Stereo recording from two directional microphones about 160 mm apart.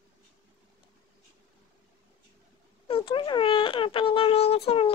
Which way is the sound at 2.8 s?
35° left (ahead or behind).